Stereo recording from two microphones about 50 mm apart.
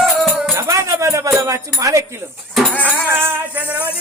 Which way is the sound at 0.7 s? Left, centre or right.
Right.